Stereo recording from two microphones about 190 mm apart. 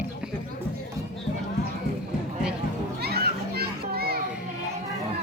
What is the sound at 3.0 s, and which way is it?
Children playing, 55° right (ahead or behind).